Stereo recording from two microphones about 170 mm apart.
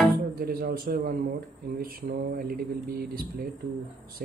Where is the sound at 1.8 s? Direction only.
60° right (ahead or behind).